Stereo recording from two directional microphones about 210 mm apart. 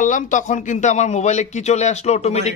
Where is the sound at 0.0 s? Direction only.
35° left (ahead or behind).